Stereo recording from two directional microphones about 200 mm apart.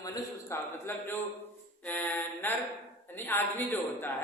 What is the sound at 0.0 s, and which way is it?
A man's voice, 15° left (ahead or behind).